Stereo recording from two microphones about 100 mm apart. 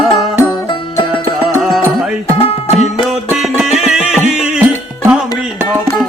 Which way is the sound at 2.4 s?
70° left (ahead or behind).